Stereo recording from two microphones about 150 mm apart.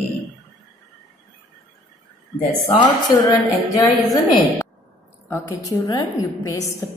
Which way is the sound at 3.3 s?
20° left (ahead or behind).